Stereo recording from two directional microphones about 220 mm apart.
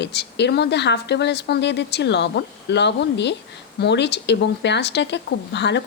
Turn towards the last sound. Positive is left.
turn(degrees=50)  # may be behind; listen again after turning